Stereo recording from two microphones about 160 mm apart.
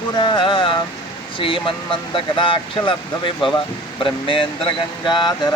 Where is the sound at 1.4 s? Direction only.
30° left (ahead or behind).